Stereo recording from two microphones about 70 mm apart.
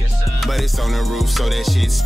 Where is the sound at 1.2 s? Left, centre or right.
Centre.